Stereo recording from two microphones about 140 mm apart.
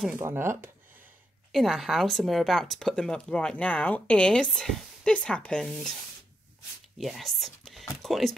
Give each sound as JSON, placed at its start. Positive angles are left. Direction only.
{"t": 0.2, "sound": "speech", "side_deg": -20}
{"t": 1.5, "sound": "a woman's voice", "side_deg": 0}
{"t": 7.0, "sound": "a woman's voice", "side_deg": 0}